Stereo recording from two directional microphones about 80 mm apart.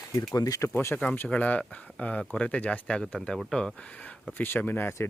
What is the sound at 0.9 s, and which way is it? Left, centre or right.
Speech, left.